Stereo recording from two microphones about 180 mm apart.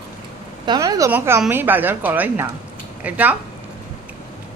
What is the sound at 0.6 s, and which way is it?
Speech, 25° right (ahead or behind).